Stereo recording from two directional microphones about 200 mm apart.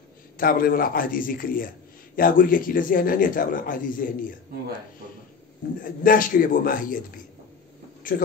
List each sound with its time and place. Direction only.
0.4 s a man's voice: 45° left (ahead or behind)
5.8 s a man's voice: 45° left (ahead or behind)
8.0 s a man's voice: 45° left (ahead or behind)